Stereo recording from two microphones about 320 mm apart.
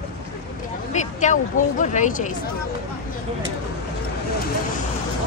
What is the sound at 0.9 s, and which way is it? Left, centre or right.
Speech, left.